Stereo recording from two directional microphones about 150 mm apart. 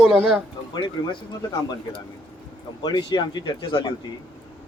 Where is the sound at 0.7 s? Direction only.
30° left (ahead or behind).